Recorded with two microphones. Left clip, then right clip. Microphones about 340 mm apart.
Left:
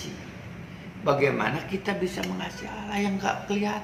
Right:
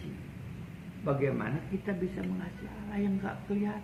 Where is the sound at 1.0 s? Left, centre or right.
Left.